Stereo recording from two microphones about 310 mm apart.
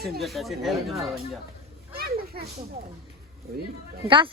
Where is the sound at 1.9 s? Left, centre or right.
Right.